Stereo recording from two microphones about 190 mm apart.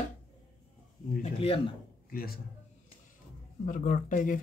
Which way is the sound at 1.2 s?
30° left (ahead or behind).